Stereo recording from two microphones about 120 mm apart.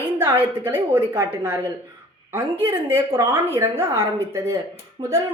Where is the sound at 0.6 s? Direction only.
15° right (ahead or behind).